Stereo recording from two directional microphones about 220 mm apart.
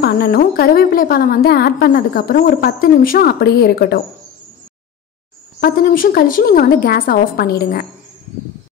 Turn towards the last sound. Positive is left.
turn(degrees=40)  # may be behind; listen again after turning